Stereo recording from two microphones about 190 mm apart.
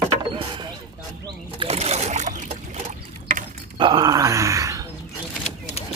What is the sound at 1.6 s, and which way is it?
Trickle, 35° right (ahead or behind).